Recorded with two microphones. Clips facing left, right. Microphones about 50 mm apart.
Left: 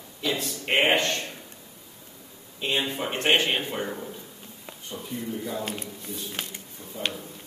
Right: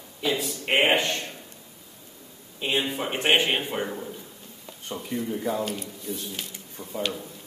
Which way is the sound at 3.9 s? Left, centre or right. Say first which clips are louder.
Even; centre.